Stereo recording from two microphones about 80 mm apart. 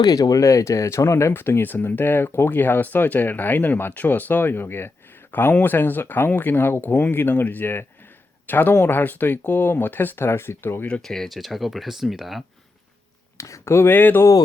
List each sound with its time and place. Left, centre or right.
0.0 s speech: left
10.8 s speech: centre
13.3 s speech: left